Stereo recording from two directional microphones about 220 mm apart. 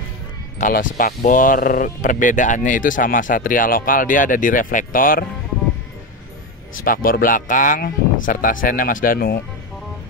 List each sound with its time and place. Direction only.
0.6 s speech: 40° left (ahead or behind)
6.8 s speech: 40° left (ahead or behind)